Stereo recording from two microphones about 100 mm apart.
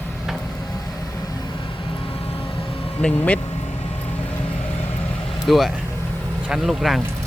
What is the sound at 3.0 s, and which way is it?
Speech, 15° left (ahead or behind).